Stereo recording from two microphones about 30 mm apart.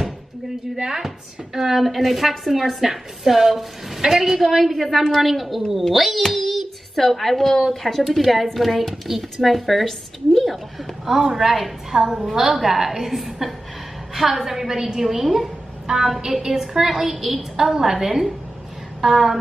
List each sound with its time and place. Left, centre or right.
0.7 s a woman's voice: centre
5.0 s a woman's voice: centre
5.3 s a woman's voice: centre
6.3 s child singing: centre
7.0 s a woman's voice: centre
11.1 s a woman's voice: centre
15.2 s a woman's voice: centre
15.9 s a woman's voice: right
18.9 s a sound: centre